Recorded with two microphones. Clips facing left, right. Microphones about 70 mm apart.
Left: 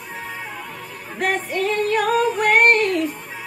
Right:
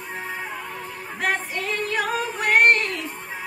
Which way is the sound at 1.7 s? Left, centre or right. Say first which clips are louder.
Left 5 dB; left.